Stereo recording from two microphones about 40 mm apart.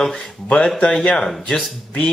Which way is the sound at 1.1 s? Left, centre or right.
Centre.